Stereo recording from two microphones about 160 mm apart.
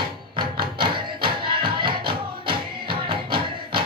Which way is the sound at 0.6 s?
30° right (ahead or behind).